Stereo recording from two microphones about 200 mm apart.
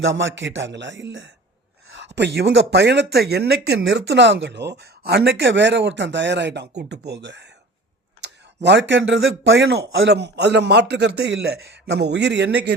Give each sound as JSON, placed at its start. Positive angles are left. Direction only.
{"t": 0.0, "sound": "speech", "side_deg": -70}